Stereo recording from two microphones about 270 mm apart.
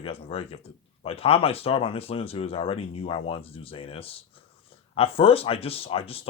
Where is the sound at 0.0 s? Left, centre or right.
Left.